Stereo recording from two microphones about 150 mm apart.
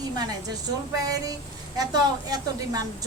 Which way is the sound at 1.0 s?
25° right (ahead or behind).